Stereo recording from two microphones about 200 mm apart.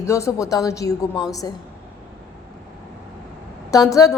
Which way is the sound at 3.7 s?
15° left (ahead or behind).